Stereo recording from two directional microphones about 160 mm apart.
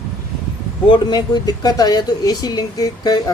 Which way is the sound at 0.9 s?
30° left (ahead or behind).